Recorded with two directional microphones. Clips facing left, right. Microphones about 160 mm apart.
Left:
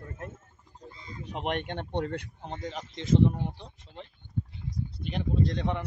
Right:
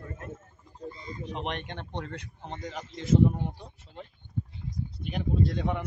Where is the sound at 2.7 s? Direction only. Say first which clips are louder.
Right 1 dB; centre (ahead or behind).